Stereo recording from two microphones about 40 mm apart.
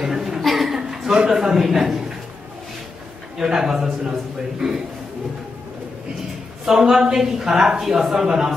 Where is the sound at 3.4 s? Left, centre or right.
Centre.